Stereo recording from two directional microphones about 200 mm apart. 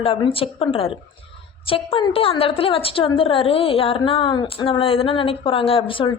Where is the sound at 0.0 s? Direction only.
25° left (ahead or behind).